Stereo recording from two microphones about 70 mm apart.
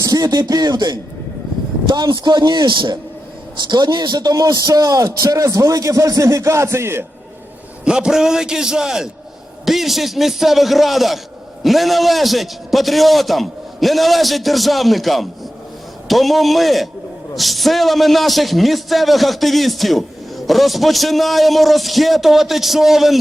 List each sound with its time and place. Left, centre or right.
0.0 s speech: right
2.0 s a man's voice: right
7.9 s a man's voice: centre